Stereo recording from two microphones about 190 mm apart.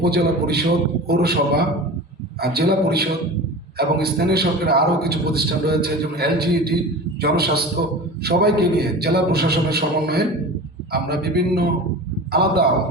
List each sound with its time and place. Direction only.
0.0 s a man's voice: 55° right (ahead or behind)